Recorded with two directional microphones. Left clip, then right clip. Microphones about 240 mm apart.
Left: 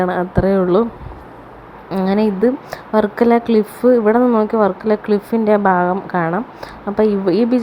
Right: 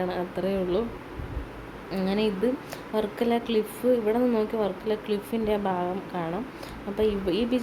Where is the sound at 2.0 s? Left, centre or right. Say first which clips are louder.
Left 10 dB; left.